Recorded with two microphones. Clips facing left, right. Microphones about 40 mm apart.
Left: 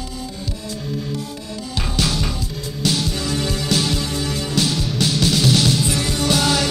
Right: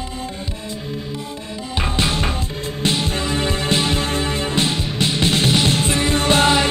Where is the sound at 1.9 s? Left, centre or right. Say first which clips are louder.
Right 1 dB; right.